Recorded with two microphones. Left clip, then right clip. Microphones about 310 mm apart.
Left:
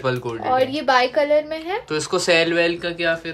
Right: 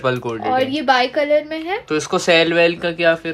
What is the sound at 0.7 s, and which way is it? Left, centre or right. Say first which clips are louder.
A woman's voice: right 1 dB; right.